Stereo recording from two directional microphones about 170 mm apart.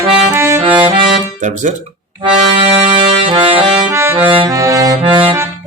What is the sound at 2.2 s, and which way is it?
Accordion, 30° right (ahead or behind).